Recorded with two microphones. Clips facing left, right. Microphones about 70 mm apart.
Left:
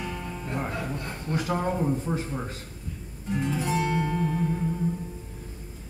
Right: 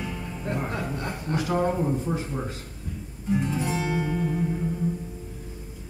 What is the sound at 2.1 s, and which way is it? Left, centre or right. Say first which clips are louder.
Speech: right 1 dB; centre.